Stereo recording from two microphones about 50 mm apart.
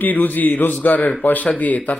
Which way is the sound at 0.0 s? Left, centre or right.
Left.